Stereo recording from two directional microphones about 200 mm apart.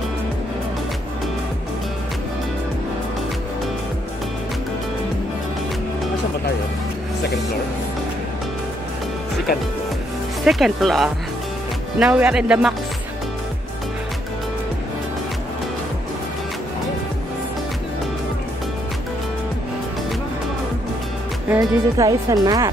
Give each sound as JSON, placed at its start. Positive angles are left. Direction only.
{"t": 10.4, "sound": "speech", "side_deg": 0}
{"t": 21.5, "sound": "speech", "side_deg": -15}